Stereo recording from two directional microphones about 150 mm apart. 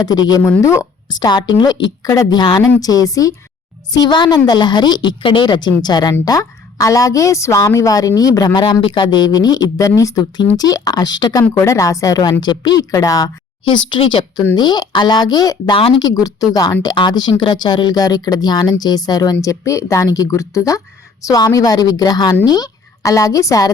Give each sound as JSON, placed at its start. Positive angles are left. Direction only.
{"t": 0.0, "sound": "a woman's voice", "side_deg": 25}